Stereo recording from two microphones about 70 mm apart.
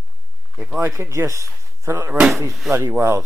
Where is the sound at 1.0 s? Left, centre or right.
Right.